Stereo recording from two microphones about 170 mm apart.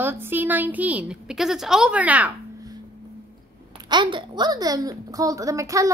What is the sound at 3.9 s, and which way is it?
Speech, 30° right (ahead or behind).